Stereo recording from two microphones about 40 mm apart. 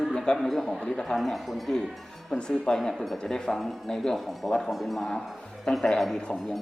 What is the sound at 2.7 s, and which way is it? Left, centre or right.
Speech, centre.